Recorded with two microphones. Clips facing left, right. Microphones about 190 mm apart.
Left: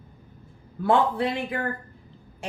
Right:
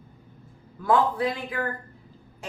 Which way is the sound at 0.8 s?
25° left (ahead or behind).